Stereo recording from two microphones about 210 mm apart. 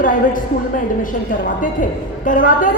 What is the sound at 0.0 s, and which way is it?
A woman's voice, 40° left (ahead or behind).